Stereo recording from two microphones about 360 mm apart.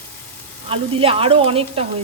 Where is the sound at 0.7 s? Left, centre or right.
Centre.